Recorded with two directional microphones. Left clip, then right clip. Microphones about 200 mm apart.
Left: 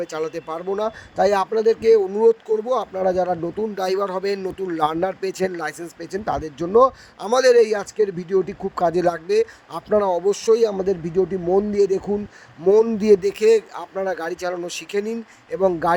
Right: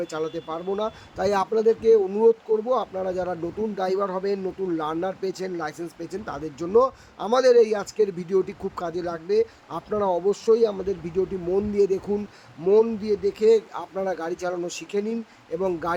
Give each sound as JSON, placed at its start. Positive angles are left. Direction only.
{"t": 0.0, "sound": "speech", "side_deg": 15}
{"t": 0.3, "sound": "speech", "side_deg": 25}
{"t": 3.8, "sound": "speech", "side_deg": 25}
{"t": 7.2, "sound": "speech", "side_deg": 30}
{"t": 8.8, "sound": "speech", "side_deg": 25}
{"t": 13.0, "sound": "speech", "side_deg": 35}
{"t": 13.9, "sound": "speech", "side_deg": 20}